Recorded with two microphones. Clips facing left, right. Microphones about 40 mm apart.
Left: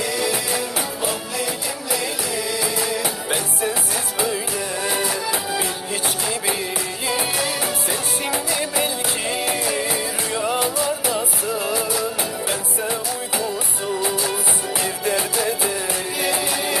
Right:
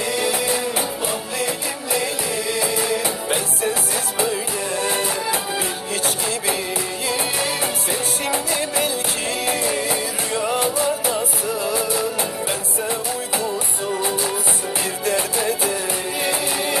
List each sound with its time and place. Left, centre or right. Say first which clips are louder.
2.6 s music: right 4 dB; centre
3.2 s music: right 1 dB; centre
9.4 s music: right 3 dB; centre
10.6 s music: right 1 dB; right
11.2 s music: right 1 dB; centre